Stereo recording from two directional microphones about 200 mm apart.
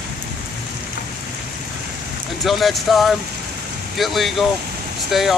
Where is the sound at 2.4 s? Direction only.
Centre (ahead or behind).